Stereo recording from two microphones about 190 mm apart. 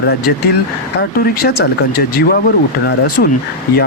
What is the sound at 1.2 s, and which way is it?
Speech, 55° left (ahead or behind).